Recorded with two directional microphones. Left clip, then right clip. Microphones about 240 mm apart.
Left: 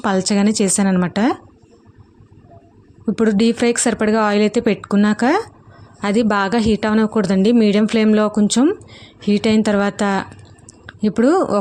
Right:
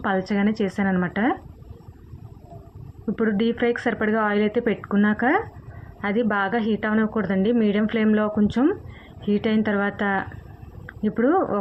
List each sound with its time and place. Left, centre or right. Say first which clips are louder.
0.0 s a woman's voice: left 6 dB; left
3.1 s a woman's voice: left 7 dB; left